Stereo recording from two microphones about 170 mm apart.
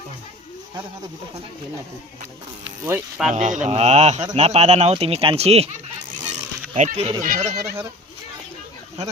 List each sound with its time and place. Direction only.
2.8 s pulleys: 10° right (ahead or behind)
3.3 s speech: 45° right (ahead or behind)
6.7 s speech: 40° right (ahead or behind)
7.2 s speech: 50° right (ahead or behind)